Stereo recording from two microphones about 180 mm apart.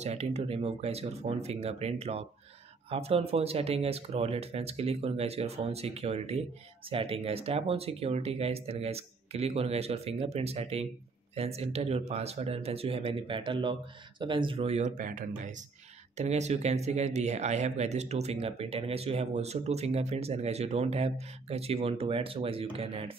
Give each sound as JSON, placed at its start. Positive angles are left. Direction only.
{"t": 0.0, "sound": "speech", "side_deg": -35}